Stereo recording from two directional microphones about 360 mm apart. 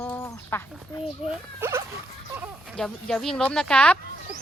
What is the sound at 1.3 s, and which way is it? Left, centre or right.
Speech, centre.